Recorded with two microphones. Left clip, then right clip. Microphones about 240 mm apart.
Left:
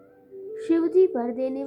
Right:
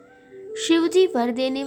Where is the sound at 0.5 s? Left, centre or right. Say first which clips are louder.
Right 2 dB; right.